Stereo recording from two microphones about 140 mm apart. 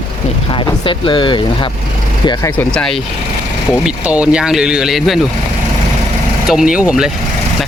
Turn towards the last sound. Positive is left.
turn(degrees=-5)  # may be behind; listen again after turning